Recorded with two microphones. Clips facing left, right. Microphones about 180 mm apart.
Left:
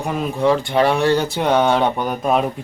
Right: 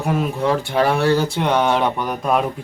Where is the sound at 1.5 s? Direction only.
30° left (ahead or behind).